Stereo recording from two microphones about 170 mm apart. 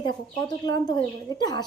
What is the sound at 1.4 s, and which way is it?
Speech, 25° left (ahead or behind).